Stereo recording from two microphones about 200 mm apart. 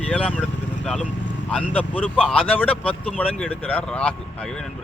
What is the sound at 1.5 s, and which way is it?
Speech, 5° left (ahead or behind).